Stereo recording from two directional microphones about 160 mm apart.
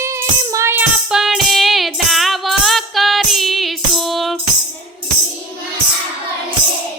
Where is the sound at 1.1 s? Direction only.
Centre (ahead or behind).